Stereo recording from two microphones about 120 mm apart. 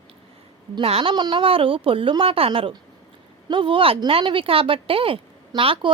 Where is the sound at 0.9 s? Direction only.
55° right (ahead or behind).